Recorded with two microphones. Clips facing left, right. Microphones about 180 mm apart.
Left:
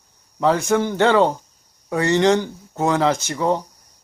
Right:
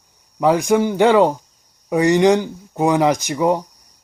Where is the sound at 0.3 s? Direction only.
15° right (ahead or behind).